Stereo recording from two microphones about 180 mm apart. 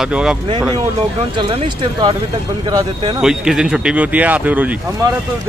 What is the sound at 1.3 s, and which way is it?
Speech, 25° right (ahead or behind).